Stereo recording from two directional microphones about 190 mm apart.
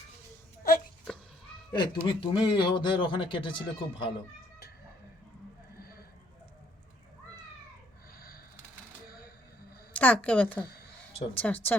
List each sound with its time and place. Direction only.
1.7 s speech: 25° left (ahead or behind)
5.8 s a sound: 50° left (ahead or behind)
9.9 s a woman's voice: 5° left (ahead or behind)